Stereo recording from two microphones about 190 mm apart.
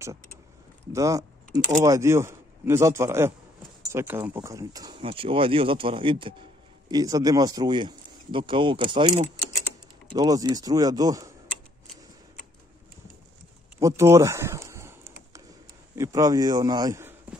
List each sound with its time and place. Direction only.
0.9 s a man's voice: 15° right (ahead or behind)
13.7 s a sound: 15° right (ahead or behind)
16.0 s speech: 20° right (ahead or behind)